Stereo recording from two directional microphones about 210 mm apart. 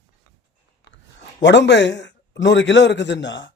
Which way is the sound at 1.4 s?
55° left (ahead or behind).